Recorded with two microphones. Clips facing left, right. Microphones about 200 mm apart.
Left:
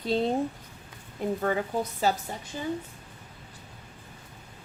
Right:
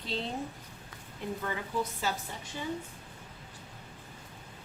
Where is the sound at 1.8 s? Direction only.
40° left (ahead or behind).